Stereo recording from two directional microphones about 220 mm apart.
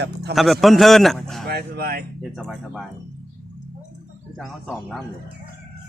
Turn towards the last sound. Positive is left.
turn(degrees=0)  # may be behind; listen again after turning